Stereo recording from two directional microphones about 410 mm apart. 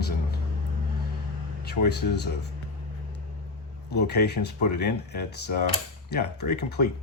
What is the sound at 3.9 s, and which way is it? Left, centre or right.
Speech, left.